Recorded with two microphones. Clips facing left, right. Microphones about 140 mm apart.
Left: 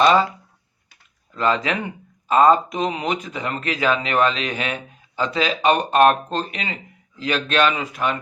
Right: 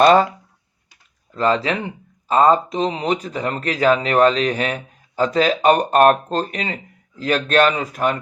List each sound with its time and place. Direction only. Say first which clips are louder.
0.0 s speech: right 3 dB; 50° right (ahead or behind)
1.3 s speech: right 2 dB; 35° right (ahead or behind)